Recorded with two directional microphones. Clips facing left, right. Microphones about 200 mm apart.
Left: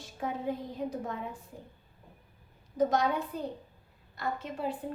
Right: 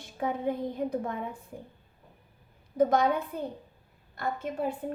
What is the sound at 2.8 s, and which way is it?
A woman's voice, 55° right (ahead or behind).